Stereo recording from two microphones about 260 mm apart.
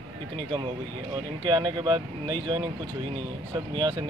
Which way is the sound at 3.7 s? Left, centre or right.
Centre.